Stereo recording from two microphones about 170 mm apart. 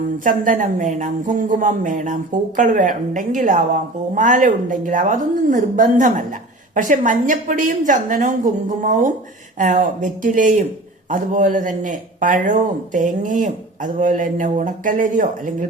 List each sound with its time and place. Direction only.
0.3 s speech: 50° right (ahead or behind)